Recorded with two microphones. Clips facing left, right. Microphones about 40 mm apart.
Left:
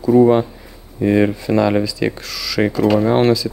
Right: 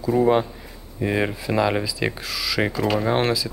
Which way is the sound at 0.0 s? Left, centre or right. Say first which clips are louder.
Left 7 dB; centre.